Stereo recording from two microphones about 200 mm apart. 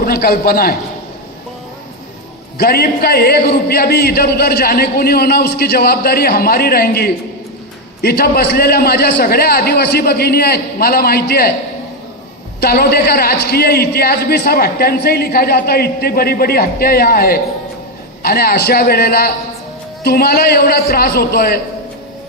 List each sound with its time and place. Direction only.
0.0 s a man's voice: 50° left (ahead or behind)
2.6 s a man's voice: 50° left (ahead or behind)
12.5 s a man's voice: 50° left (ahead or behind)